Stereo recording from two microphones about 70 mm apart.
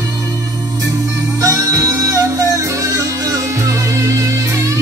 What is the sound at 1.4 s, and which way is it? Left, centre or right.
Music, right.